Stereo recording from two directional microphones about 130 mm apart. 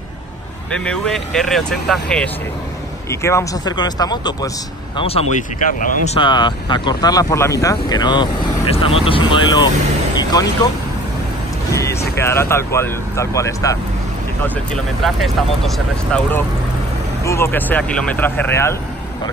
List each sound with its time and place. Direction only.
0.7 s speech: 5° left (ahead or behind)
3.1 s speech: 20° left (ahead or behind)
3.7 s speech: 35° left (ahead or behind)
4.9 s speech: 50° left (ahead or behind)
5.6 s speech: 85° left
6.1 s speech: 35° left (ahead or behind)
8.6 s speech: 50° left (ahead or behind); by 10.7 s 30° left (ahead or behind)
11.7 s speech: 25° left (ahead or behind)
15.0 s speech: centre (ahead or behind)
17.2 s speech: 20° left (ahead or behind)